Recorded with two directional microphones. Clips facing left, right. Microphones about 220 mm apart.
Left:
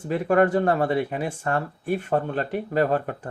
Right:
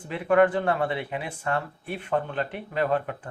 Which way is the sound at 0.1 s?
45° left (ahead or behind).